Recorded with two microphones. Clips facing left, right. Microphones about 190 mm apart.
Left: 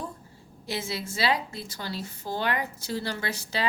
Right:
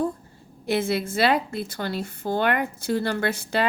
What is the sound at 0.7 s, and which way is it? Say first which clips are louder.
A woman's voice: right 9 dB; 55° right (ahead or behind).